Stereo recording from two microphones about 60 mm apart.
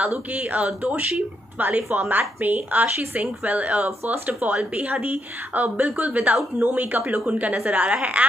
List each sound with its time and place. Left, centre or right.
0.0 s speech: right